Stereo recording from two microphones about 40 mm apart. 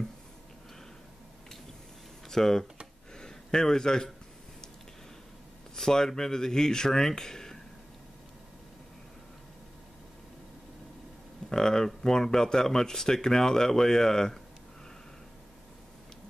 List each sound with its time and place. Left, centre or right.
2.2 s speech: centre
3.2 s a sound: centre
5.8 s speech: centre
11.4 s speech: centre